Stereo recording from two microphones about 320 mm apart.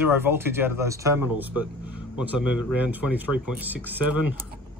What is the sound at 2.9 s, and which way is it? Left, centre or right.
Speech, centre.